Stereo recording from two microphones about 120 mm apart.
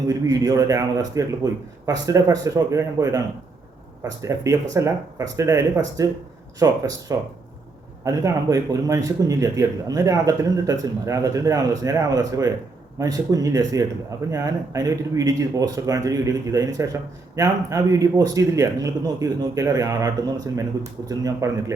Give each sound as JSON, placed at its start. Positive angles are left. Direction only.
{"t": 0.1, "sound": "speech", "side_deg": -30}
{"t": 4.2, "sound": "speech", "side_deg": -25}